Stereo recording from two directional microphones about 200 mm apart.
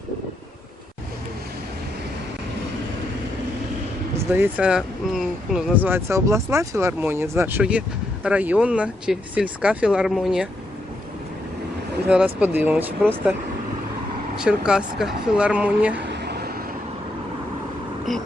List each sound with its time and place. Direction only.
4.3 s speech: 10° right (ahead or behind)
12.0 s speech: 5° right (ahead or behind)
14.3 s speech: 5° right (ahead or behind)
16.0 s vehicle: 55° right (ahead or behind)
18.1 s speech: centre (ahead or behind)